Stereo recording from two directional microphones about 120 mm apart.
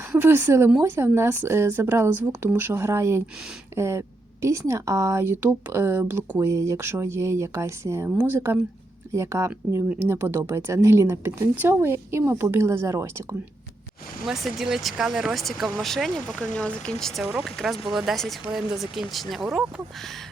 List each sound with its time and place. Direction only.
0.1 s a woman's voice: 15° right (ahead or behind)
9.1 s speech: 25° right (ahead or behind)
14.3 s speech: centre (ahead or behind)